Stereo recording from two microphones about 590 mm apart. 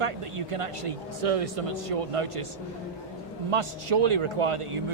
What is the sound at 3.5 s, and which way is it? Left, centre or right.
Speech, right.